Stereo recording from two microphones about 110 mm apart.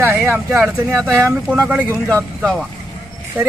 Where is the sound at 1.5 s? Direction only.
10° right (ahead or behind).